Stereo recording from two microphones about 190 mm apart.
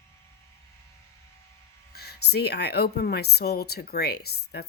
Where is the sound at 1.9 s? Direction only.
55° left (ahead or behind).